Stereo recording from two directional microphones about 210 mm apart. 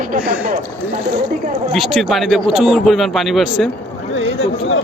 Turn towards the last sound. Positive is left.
turn(degrees=0)  # may be behind; listen again after turning